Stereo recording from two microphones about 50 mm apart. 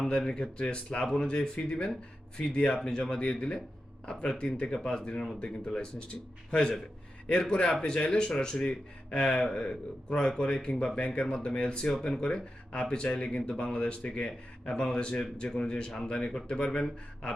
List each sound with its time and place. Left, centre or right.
0.0 s speech: centre
11.9 s speech: centre